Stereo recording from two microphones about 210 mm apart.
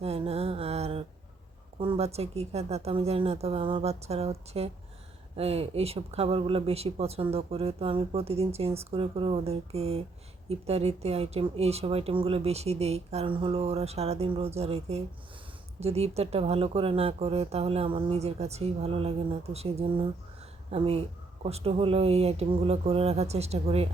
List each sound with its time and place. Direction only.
0.0 s mantra: 30° right (ahead or behind)
1.8 s speech: 25° right (ahead or behind)